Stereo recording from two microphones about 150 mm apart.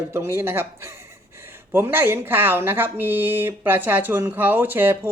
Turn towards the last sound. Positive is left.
turn(degrees=-15)  # may be behind; listen again after turning